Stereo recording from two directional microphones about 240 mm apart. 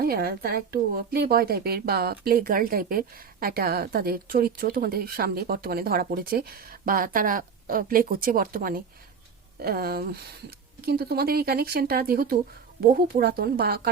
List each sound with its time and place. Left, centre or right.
0.0 s speech: right